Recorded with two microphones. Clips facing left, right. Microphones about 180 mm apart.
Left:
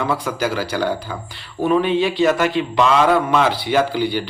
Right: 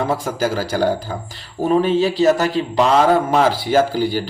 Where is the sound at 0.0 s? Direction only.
45° right (ahead or behind).